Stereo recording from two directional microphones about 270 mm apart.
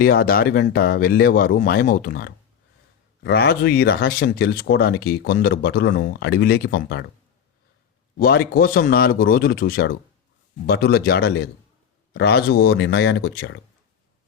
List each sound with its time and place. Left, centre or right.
0.0 s speech: left
8.2 s speech: left